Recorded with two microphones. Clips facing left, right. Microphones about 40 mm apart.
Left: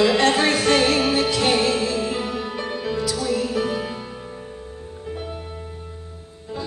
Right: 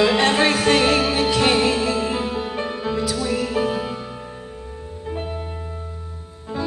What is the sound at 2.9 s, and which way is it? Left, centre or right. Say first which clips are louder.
Music: even; right.